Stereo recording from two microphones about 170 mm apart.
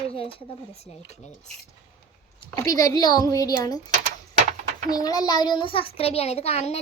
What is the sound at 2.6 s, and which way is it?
Speech, 20° left (ahead or behind).